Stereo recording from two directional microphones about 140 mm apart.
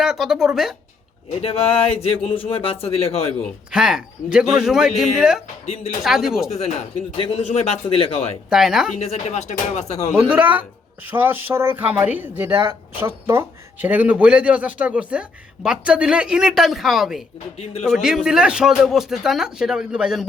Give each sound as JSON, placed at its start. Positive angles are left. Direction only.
{"t": 0.0, "sound": "speech", "side_deg": -5}
{"t": 1.4, "sound": "speech", "side_deg": 45}
{"t": 3.7, "sound": "speech", "side_deg": -5}
{"t": 5.6, "sound": "speech", "side_deg": 50}
{"t": 6.0, "sound": "speech", "side_deg": 0}
{"t": 6.5, "sound": "speech", "side_deg": 50}
{"t": 8.4, "sound": "speech", "side_deg": -5}
{"t": 9.0, "sound": "speech", "side_deg": 50}
{"t": 10.2, "sound": "speech", "side_deg": -10}